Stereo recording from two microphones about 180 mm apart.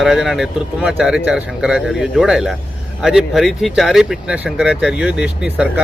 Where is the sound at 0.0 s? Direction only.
Centre (ahead or behind).